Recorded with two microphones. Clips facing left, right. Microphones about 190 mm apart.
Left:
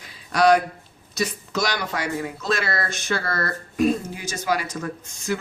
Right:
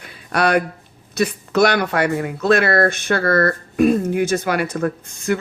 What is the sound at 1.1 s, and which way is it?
Speech, 60° right (ahead or behind).